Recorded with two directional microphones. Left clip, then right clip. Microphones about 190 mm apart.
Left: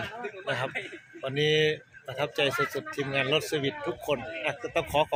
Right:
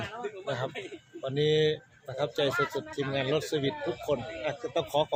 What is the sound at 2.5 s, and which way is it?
Speech, 30° left (ahead or behind).